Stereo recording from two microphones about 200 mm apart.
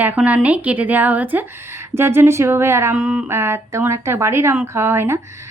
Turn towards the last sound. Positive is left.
turn(degrees=-10)  # may be behind; listen again after turning